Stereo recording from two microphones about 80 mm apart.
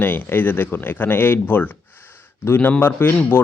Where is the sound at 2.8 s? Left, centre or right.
Left.